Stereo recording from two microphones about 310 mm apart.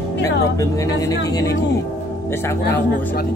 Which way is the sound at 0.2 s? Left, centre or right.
Centre.